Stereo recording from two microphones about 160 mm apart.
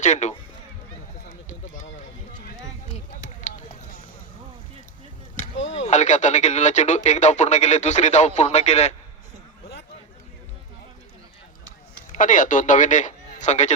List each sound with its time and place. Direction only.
0.0 s speech: 45° left (ahead or behind)
1.5 s run: 50° left (ahead or behind)
3.4 s a sound: 50° left (ahead or behind)
5.4 s speech: 45° left (ahead or behind)
12.1 s a man's voice: 55° left (ahead or behind)